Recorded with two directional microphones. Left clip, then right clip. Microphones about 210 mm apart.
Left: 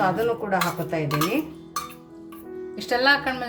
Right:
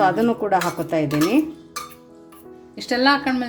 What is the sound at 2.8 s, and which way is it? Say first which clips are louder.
Speech: right 2 dB; 5° right (ahead or behind).